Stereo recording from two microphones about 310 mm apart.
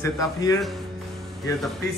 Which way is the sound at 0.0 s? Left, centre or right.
Centre.